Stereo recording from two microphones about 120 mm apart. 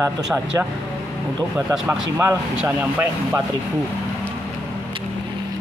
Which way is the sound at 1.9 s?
15° right (ahead or behind).